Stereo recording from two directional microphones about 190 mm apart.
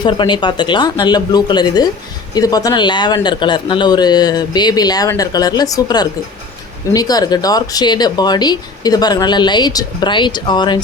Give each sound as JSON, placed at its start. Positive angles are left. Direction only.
{"t": 0.0, "sound": "speech", "side_deg": 25}